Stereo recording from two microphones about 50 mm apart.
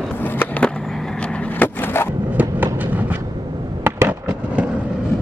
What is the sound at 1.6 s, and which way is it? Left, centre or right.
Skateboard, left.